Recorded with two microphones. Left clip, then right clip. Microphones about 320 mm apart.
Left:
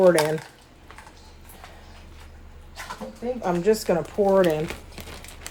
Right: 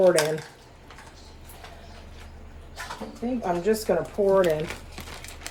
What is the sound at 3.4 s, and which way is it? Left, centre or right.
Speech, left.